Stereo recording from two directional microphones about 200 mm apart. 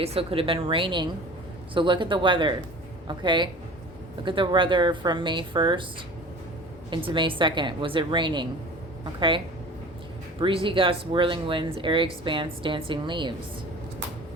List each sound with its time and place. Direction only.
0.0 s speech: 30° right (ahead or behind)
6.9 s speech: 25° right (ahead or behind)
10.4 s speech: 25° right (ahead or behind)